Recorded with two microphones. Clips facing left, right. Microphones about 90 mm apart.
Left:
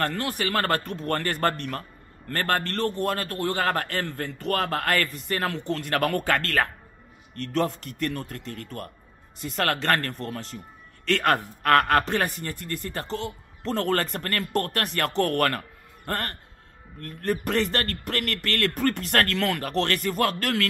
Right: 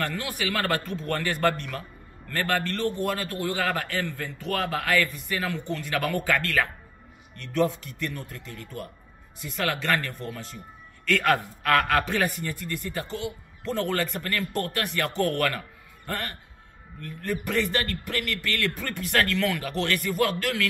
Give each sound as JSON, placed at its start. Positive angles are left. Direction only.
{"t": 0.0, "sound": "a man's voice", "side_deg": 45}